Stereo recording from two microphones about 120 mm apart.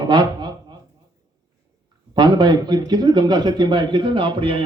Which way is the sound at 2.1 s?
40° right (ahead or behind).